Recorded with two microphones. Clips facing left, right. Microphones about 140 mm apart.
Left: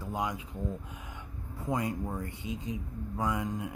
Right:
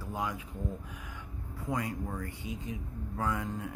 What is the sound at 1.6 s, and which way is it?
Speech, 20° left (ahead or behind).